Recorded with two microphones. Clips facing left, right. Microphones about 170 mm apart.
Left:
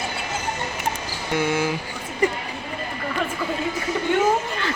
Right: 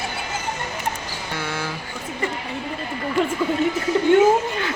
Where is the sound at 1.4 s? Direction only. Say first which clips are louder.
Left 7 dB; 15° left (ahead or behind).